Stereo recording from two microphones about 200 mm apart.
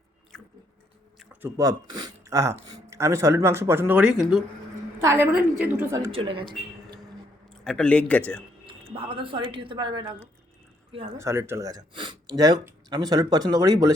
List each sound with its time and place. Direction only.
0.3 s chewing: 5° left (ahead or behind)
1.2 s a sound: 5° right (ahead or behind)
1.5 s speech: 20° right (ahead or behind)
6.1 s speech: 25° right (ahead or behind)
7.6 s a man's voice: 5° left (ahead or behind)
8.6 s speech: 25° right (ahead or behind)